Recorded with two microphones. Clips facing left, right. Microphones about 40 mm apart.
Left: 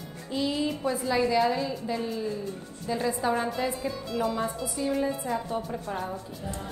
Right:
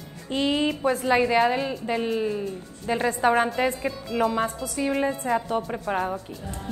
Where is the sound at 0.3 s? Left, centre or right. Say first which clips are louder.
Right 5 dB; right.